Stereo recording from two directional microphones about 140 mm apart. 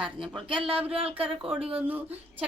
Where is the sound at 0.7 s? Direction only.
10° right (ahead or behind).